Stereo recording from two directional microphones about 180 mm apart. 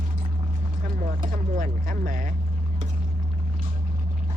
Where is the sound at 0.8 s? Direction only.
50° right (ahead or behind).